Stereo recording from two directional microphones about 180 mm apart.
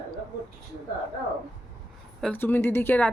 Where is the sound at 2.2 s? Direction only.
10° left (ahead or behind).